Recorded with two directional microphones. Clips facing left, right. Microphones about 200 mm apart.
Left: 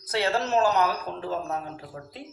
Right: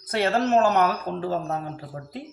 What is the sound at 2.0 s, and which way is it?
Speech, 35° right (ahead or behind).